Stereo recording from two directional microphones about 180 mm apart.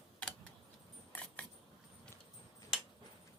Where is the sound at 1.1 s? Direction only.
5° left (ahead or behind).